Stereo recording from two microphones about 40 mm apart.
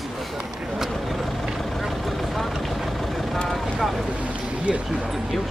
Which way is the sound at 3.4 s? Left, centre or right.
Centre.